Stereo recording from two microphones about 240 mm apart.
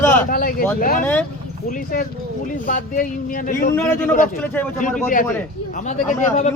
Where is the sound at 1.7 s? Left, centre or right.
Left.